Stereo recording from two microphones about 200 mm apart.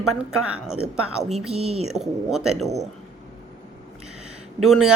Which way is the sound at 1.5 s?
30° right (ahead or behind).